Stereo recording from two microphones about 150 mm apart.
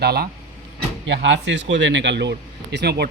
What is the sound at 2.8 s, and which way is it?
Speech, 90° right.